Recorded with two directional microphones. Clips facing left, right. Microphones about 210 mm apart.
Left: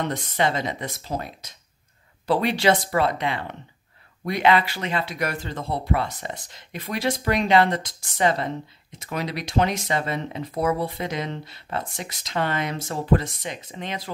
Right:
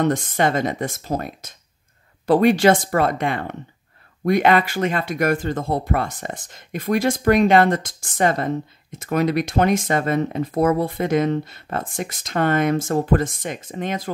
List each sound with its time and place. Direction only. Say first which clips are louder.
0.0 s speech: right 5 dB; 50° right (ahead or behind)